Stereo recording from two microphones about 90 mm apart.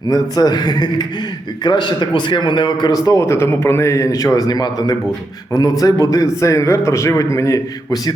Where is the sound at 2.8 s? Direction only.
40° left (ahead or behind).